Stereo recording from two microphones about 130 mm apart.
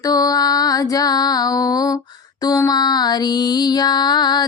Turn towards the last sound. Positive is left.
turn(degrees=30)  # may be behind; listen again after turning